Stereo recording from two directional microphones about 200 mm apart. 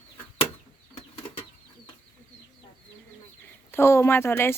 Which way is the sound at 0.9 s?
30° left (ahead or behind).